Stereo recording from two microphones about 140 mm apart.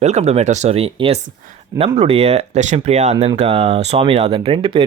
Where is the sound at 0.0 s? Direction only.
50° right (ahead or behind).